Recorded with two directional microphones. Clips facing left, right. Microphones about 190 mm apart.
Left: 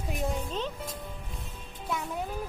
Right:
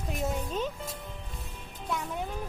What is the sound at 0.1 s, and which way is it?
Music, centre (ahead or behind).